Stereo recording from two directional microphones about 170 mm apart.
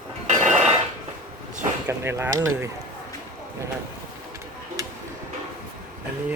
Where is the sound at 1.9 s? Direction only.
15° right (ahead or behind).